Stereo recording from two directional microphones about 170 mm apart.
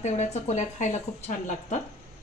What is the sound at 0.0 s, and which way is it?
Speech, 45° left (ahead or behind).